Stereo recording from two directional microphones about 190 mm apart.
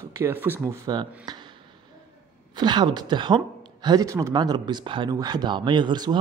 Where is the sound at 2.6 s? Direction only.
25° right (ahead or behind).